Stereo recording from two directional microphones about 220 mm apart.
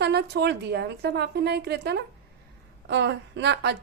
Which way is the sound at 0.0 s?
50° right (ahead or behind).